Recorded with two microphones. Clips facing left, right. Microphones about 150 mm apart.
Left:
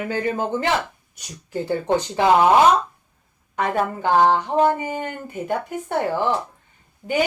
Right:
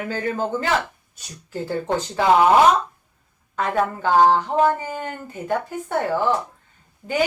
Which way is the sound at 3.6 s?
20° left (ahead or behind).